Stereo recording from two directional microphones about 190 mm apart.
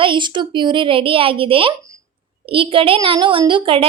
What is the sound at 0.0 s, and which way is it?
Speech, 25° right (ahead or behind).